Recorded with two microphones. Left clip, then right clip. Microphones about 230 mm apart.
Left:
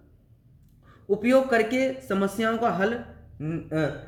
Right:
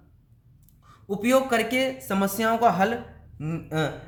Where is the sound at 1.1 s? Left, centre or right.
Right.